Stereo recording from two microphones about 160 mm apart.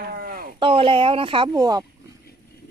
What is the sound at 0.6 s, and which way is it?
Speech, 35° right (ahead or behind).